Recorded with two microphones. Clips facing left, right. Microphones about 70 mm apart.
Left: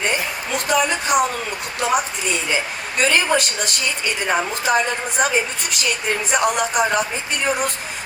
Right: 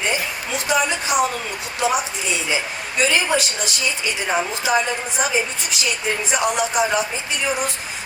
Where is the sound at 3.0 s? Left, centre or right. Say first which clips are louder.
Left 1 dB; left.